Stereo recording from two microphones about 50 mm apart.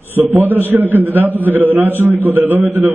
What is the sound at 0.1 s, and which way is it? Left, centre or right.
A man's voice, right.